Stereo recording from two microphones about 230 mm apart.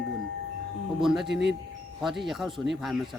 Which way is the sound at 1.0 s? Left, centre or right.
Centre.